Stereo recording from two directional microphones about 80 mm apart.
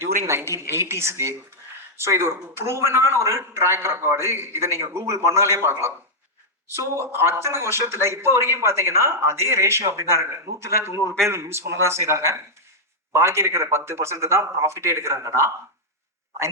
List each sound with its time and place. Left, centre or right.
0.3 s a man's voice: right